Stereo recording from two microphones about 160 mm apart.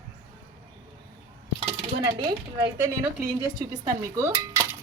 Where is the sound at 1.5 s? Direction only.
30° right (ahead or behind).